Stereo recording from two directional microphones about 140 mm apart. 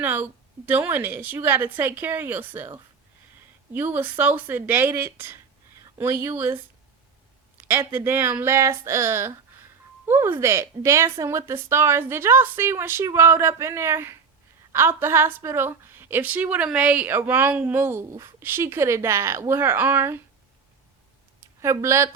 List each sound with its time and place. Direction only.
0.0 s a woman's voice: 15° right (ahead or behind)
7.9 s a woman's voice: 15° right (ahead or behind)
21.6 s speech: 20° right (ahead or behind)